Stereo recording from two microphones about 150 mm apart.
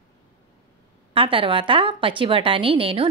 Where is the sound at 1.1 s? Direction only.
35° right (ahead or behind).